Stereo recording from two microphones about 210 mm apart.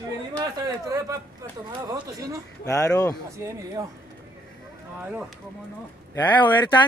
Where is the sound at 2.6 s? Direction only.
15° left (ahead or behind).